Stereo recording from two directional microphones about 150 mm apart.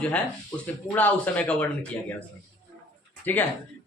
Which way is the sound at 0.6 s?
10° left (ahead or behind).